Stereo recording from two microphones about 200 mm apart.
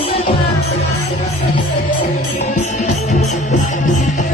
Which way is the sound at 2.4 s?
35° left (ahead or behind).